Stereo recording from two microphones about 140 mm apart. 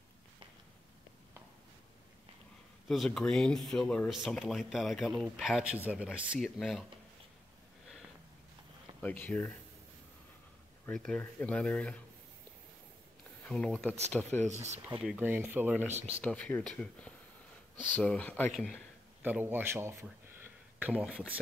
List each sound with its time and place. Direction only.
2.9 s speech: centre (ahead or behind)
9.0 s speech: 10° left (ahead or behind)
10.9 s speech: 5° left (ahead or behind)
13.5 s speech: 5° left (ahead or behind)
14.4 s speech: 55° right (ahead or behind)
14.9 s speech: 10° right (ahead or behind)
15.9 s speech: 50° right (ahead or behind)
16.2 s speech: 10° left (ahead or behind)
19.2 s speech: 15° right (ahead or behind)
20.8 s speech: 10° right (ahead or behind)